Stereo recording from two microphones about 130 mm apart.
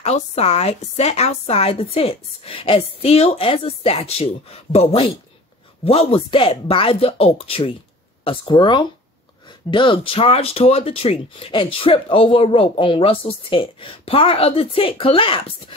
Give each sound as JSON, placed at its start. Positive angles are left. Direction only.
{"t": 0.0, "sound": "speech", "side_deg": 55}